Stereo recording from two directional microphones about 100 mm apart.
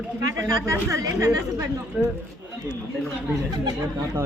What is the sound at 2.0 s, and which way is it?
Snicker, 10° right (ahead or behind).